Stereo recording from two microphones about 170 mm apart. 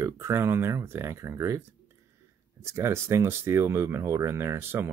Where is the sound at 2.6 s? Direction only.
15° right (ahead or behind).